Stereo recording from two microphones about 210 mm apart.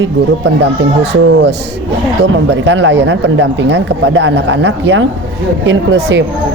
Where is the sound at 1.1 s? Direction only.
55° right (ahead or behind).